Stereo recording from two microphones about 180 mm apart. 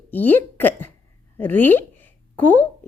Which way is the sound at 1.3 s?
10° left (ahead or behind).